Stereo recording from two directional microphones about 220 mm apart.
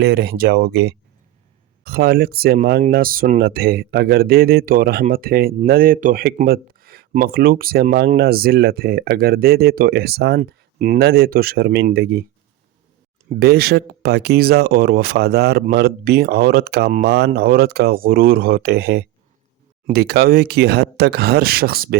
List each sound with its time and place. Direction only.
0.0 s speech: 45° right (ahead or behind)
13.4 s speech: 45° right (ahead or behind)